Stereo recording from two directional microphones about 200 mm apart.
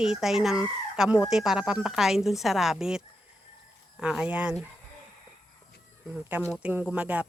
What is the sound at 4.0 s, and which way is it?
Speech, 5° right (ahead or behind).